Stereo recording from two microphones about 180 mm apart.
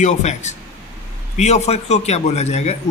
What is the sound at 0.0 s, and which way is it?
A man's voice, 40° left (ahead or behind).